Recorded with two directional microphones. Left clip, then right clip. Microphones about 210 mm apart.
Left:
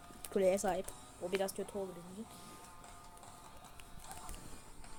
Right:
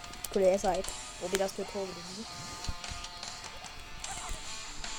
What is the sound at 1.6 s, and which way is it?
Speech, 15° right (ahead or behind).